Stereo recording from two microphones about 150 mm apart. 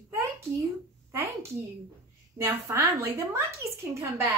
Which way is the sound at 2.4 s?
20° right (ahead or behind).